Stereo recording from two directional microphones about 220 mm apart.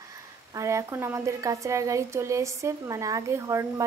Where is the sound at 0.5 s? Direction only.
15° right (ahead or behind).